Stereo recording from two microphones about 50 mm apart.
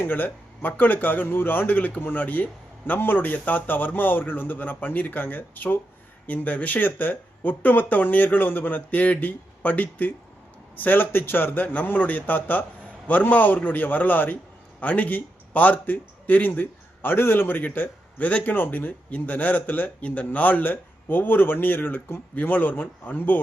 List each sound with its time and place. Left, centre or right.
0.0 s a man's voice: left
18.5 s a man's voice: left